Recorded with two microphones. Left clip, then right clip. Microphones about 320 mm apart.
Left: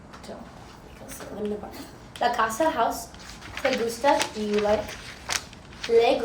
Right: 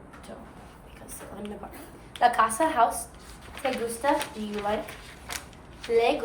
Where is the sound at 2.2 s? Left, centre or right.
Centre.